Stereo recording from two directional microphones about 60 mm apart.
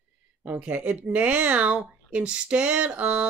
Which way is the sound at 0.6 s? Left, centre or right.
Right.